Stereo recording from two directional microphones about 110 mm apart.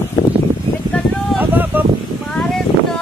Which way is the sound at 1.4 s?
15° right (ahead or behind).